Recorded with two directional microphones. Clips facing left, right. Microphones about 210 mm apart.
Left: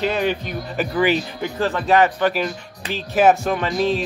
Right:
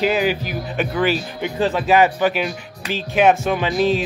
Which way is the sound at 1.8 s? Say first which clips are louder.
Even; 5° right (ahead or behind).